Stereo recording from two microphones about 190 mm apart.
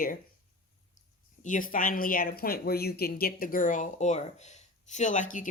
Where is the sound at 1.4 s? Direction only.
45° left (ahead or behind).